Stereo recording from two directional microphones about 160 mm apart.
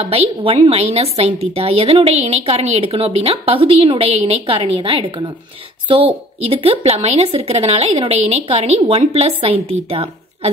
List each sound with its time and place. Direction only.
0.0 s a woman's voice: 35° right (ahead or behind)